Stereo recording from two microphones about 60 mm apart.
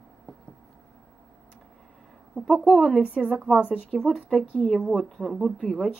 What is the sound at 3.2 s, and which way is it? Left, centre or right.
Speech, centre.